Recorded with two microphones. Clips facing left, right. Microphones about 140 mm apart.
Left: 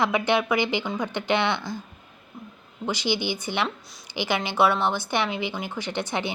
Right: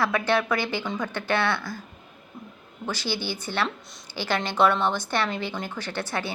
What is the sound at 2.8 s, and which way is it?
A woman's voice, 15° left (ahead or behind).